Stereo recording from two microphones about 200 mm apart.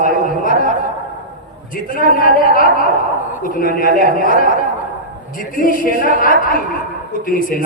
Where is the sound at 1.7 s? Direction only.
45° left (ahead or behind).